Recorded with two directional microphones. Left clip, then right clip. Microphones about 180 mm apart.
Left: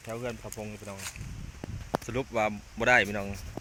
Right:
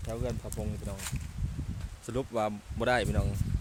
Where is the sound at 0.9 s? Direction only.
15° left (ahead or behind).